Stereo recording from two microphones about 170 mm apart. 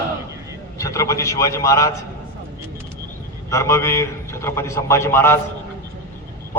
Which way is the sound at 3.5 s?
15° left (ahead or behind).